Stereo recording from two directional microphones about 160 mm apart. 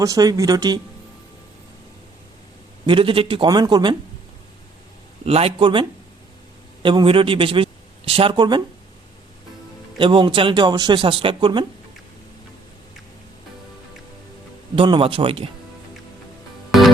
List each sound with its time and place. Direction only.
0.0 s speech: 20° right (ahead or behind)
2.8 s speech: 30° right (ahead or behind)
5.2 s speech: 40° right (ahead or behind)
6.8 s a man's voice: 30° right (ahead or behind)
10.0 s speech: 30° right (ahead or behind)
14.8 s speech: 35° right (ahead or behind)